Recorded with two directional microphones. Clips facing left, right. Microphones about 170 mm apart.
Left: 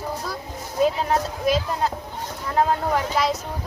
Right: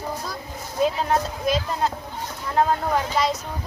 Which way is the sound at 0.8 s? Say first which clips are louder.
Left 1 dB; 5° left (ahead or behind).